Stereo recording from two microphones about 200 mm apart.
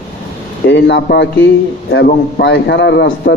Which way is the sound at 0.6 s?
65° left (ahead or behind).